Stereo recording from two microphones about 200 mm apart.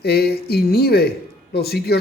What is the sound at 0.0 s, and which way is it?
Speech, 50° left (ahead or behind).